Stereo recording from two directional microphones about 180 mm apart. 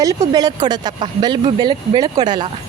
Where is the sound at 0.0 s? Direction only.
20° right (ahead or behind).